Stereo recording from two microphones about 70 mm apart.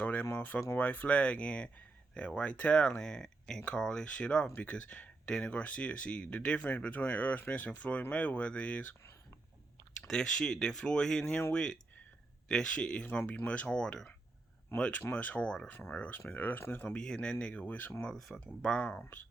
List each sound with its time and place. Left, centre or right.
0.0 s a sound: left
0.3 s speech: left
10.1 s speech: centre; by 16.9 s left
16.9 s speech: centre
18.0 s speech: centre
18.9 s speech: left